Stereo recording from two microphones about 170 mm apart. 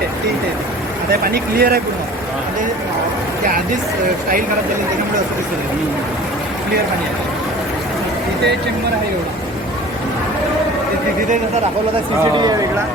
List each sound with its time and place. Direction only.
1.1 s speech: 65° right (ahead or behind)